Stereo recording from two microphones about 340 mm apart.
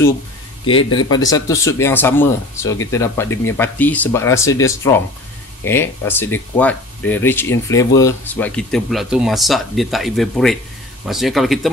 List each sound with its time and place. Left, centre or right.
0.7 s speech: left
1.0 s speech: centre